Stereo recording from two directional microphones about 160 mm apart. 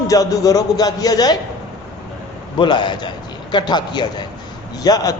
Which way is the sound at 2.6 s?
30° left (ahead or behind).